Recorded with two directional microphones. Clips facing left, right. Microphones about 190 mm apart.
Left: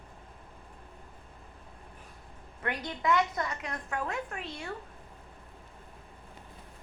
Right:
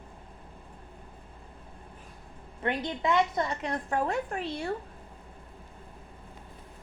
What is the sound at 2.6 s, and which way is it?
A woman's voice, 25° right (ahead or behind).